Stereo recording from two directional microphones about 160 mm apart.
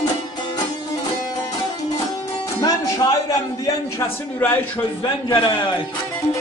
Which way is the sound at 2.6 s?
20° left (ahead or behind).